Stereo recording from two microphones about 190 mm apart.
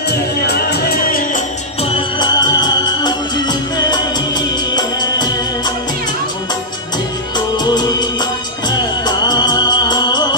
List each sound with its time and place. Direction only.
0.1 s music: 60° left (ahead or behind)
1.8 s music: 25° left (ahead or behind)
7.3 s music of bollywood: 20° left (ahead or behind)